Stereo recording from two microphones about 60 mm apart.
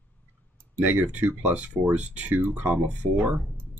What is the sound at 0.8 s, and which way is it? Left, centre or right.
Speech, right.